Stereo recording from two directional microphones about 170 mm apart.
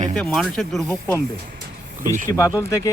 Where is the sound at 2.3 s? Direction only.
20° left (ahead or behind).